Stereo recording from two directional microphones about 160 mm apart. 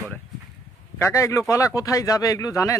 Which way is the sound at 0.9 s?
15° left (ahead or behind).